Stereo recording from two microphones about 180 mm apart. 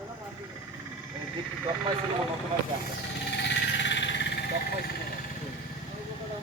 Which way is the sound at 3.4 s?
80° left.